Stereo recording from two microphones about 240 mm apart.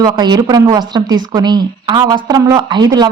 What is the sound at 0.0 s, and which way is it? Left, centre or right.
A woman's voice, centre.